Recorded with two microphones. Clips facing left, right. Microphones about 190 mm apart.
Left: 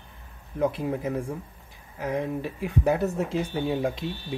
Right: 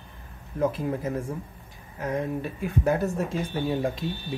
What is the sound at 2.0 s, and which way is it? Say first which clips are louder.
Speech: even; 10° left (ahead or behind).